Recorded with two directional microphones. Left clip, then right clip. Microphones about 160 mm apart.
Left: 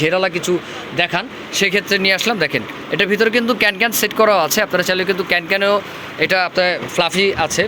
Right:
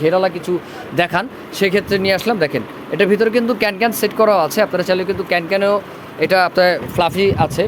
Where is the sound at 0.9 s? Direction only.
50° right (ahead or behind).